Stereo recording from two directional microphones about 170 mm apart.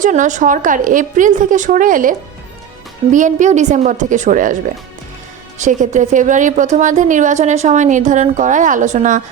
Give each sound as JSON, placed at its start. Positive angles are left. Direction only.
{"t": 0.0, "sound": "speech", "side_deg": -45}
{"t": 5.5, "sound": "speech", "side_deg": -45}